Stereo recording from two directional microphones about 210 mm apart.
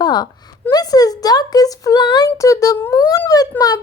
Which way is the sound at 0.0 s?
20° left (ahead or behind).